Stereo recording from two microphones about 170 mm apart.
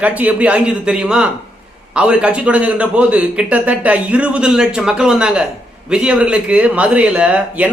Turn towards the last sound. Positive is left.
turn(degrees=-10)  # may be behind; listen again after turning